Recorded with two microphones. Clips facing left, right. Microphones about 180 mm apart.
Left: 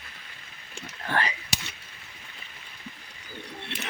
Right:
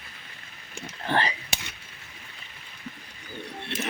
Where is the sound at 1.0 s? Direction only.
30° right (ahead or behind).